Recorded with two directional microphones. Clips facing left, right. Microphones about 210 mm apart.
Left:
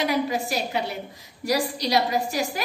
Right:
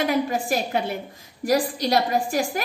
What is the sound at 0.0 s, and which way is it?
A woman's voice, 50° right (ahead or behind).